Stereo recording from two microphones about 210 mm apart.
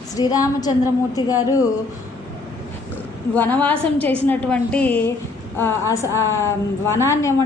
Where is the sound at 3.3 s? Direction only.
5° left (ahead or behind).